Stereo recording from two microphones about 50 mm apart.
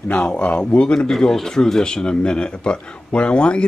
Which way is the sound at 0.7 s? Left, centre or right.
Left.